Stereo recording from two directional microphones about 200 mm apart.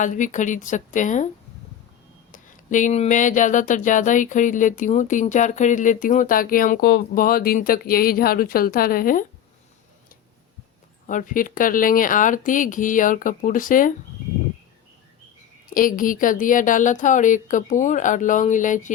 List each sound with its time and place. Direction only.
0.0 s speech: 40° left (ahead or behind)
2.3 s speech: 40° left (ahead or behind)
11.0 s speech: 40° left (ahead or behind)
15.7 s speech: 45° left (ahead or behind)